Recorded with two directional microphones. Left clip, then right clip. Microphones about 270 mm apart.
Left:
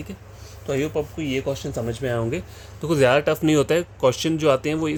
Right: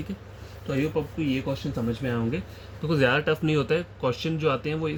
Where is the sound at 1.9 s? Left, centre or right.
Left.